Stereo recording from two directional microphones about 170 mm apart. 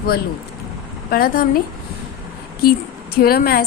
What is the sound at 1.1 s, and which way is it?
Speech, 60° left (ahead or behind).